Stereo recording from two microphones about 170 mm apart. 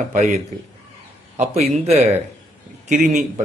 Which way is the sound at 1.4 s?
40° right (ahead or behind).